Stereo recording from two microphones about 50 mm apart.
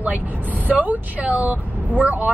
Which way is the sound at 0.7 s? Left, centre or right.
Right.